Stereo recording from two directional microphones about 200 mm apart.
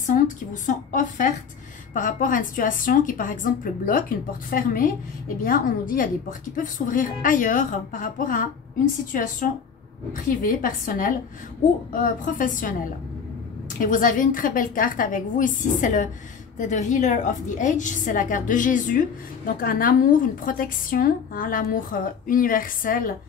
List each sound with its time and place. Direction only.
0.0 s a woman's voice: 40° left (ahead or behind)
13.7 s a woman's voice: 40° left (ahead or behind)